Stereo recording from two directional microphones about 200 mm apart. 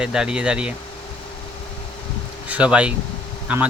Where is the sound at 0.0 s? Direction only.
5° right (ahead or behind).